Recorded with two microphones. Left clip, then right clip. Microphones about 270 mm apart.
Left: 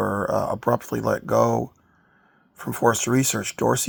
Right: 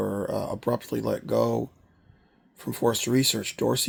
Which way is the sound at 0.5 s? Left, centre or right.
Centre.